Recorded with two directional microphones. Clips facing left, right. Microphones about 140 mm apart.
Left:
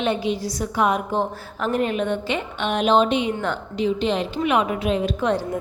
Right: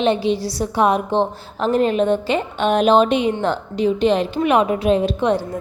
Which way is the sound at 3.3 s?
30° right (ahead or behind).